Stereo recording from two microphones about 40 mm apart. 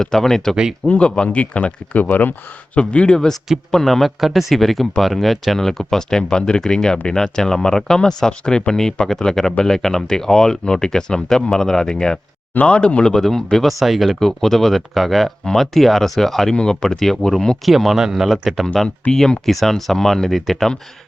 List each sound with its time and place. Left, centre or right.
0.0 s speech: centre
0.9 s speech: left
2.7 s speech: left
3.7 s speech: centre
12.5 s speech: left
13.1 s speech: centre
13.7 s speech: centre
14.2 s speech: centre
17.7 s speech: centre
18.6 s speech: centre